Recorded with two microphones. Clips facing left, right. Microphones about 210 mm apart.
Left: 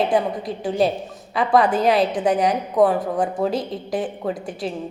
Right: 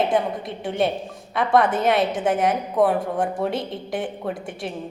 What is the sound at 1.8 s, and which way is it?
A woman's voice, centre (ahead or behind).